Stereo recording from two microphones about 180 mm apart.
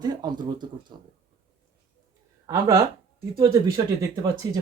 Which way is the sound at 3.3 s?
15° right (ahead or behind).